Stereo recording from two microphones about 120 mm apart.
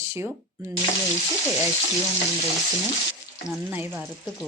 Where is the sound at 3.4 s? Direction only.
15° right (ahead or behind).